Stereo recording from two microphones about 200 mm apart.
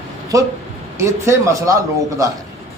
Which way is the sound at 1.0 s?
15° right (ahead or behind).